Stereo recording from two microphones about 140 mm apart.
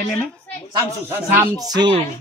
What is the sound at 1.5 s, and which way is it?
Speech, 30° right (ahead or behind).